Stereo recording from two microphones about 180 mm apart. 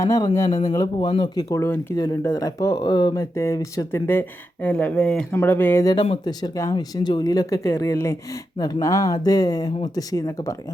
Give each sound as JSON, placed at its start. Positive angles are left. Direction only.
{"t": 0.0, "sound": "speech", "side_deg": 20}